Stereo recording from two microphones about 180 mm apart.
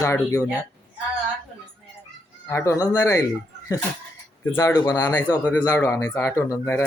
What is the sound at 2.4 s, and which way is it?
Speech, 15° left (ahead or behind).